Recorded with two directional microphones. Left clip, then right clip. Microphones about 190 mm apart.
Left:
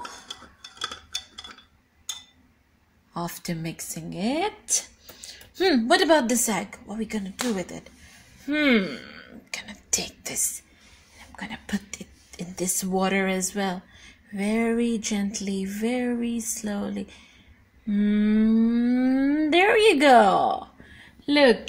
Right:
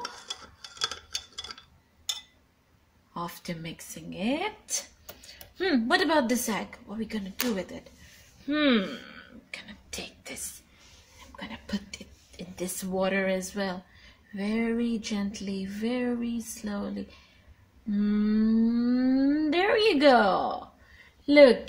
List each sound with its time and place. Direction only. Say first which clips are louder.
3.1 s speech: left 4 dB; 40° left (ahead or behind)
8.5 s a sound: left 3 dB; 35° left (ahead or behind)
11.3 s speech: left 4 dB; 35° left (ahead or behind)